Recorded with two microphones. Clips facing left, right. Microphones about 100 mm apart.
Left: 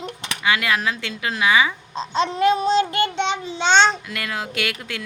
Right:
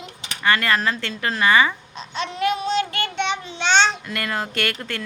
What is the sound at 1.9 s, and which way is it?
Child singing, 30° left (ahead or behind).